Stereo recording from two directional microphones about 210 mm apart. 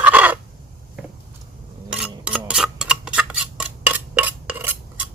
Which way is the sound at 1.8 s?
5° right (ahead or behind).